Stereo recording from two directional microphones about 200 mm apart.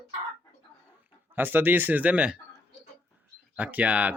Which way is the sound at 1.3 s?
10° right (ahead or behind).